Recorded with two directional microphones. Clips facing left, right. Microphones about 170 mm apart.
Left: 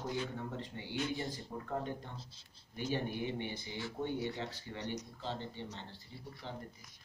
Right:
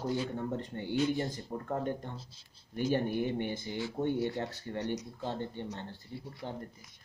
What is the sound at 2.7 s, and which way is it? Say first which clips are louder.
Speech: right 7 dB; 50° right (ahead or behind).